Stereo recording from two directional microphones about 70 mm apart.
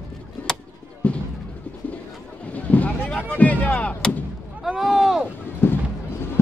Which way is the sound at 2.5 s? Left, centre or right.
Left.